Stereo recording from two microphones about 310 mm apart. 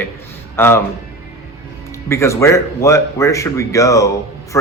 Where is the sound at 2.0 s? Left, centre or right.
Centre.